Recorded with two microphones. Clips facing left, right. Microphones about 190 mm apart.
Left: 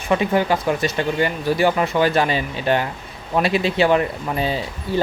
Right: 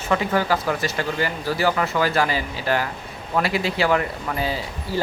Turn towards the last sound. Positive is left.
turn(degrees=25)  # may be behind; listen again after turning